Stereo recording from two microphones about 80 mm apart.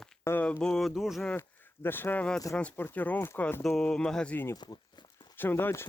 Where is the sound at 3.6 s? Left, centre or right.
Centre.